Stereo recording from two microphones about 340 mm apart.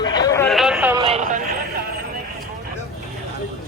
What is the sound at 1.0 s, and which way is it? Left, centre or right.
Vehicle, centre.